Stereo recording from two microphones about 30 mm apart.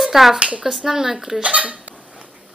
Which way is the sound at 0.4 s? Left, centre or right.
Right.